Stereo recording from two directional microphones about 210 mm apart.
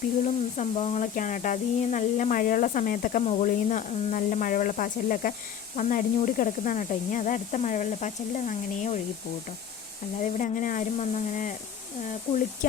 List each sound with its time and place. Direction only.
0.5 s speech: 30° left (ahead or behind)
10.2 s speech: 40° left (ahead or behind)